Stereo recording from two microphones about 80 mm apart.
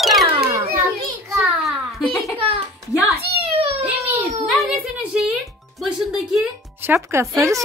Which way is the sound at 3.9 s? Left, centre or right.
Right.